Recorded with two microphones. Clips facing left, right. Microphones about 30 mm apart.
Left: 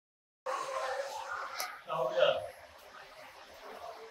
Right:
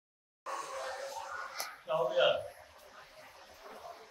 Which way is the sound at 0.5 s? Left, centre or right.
Left.